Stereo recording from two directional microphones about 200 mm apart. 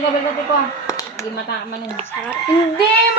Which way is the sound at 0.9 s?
15° left (ahead or behind).